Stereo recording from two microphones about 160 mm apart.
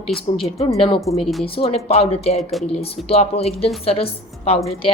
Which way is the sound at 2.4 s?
Centre (ahead or behind).